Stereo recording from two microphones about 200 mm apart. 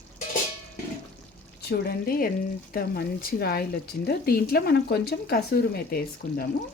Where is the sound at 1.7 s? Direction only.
50° left (ahead or behind).